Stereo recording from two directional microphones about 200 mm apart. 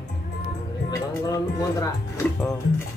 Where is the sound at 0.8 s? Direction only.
15° left (ahead or behind).